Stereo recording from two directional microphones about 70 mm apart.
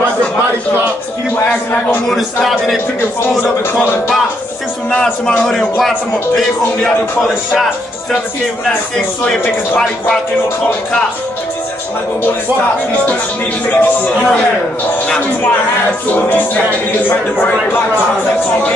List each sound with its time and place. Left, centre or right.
2.0 s a man's voice: centre
5.0 s a man's voice: centre
13.7 s a man's voice: left